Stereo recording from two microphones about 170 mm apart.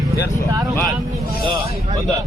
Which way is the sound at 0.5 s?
20° right (ahead or behind).